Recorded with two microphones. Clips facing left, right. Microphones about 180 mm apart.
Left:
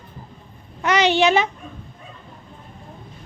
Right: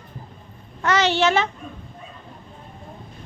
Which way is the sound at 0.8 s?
15° left (ahead or behind).